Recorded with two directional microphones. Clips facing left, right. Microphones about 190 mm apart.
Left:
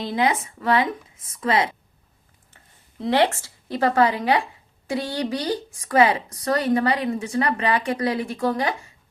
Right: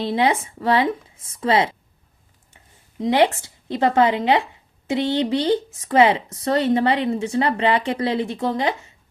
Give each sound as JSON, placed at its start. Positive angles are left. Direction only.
{"t": 0.0, "sound": "speech", "side_deg": -30}
{"t": 3.0, "sound": "speech", "side_deg": -15}